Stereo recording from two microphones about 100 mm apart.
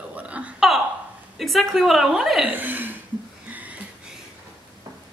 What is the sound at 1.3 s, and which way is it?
A woman's voice, centre (ahead or behind).